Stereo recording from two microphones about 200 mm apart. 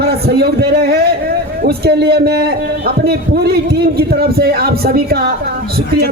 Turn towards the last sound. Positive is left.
turn(degrees=-50)  # may be behind; listen again after turning